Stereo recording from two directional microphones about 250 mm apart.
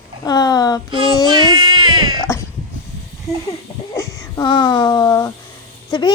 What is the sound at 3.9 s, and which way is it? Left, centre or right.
A child's voice, centre.